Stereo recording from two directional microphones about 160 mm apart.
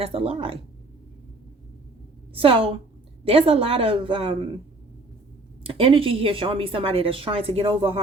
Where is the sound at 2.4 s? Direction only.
35° right (ahead or behind).